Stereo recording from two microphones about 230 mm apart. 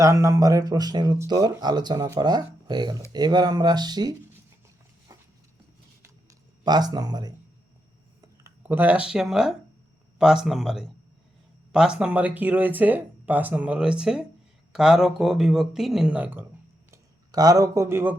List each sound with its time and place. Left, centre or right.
0.0 s speech: centre
6.7 s speech: centre
8.4 s speech: centre